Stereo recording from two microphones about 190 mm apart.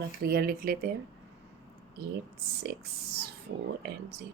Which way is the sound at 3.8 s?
60° right (ahead or behind).